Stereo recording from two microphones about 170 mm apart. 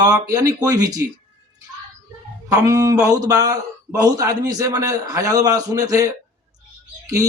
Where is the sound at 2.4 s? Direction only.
20° right (ahead or behind).